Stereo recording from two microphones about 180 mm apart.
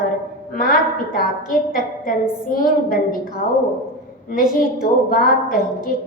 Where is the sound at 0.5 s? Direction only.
50° left (ahead or behind).